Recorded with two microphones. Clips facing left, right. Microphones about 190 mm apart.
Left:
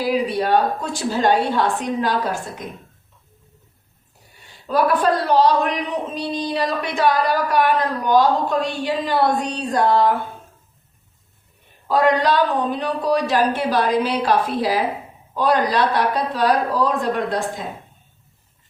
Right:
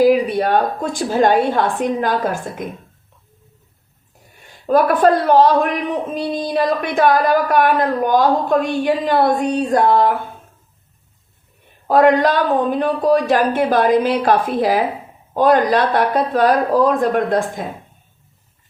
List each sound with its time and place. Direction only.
0.0 s a man's voice: 50° right (ahead or behind)
4.6 s a man's voice: 50° right (ahead or behind)
11.9 s a man's voice: 50° right (ahead or behind)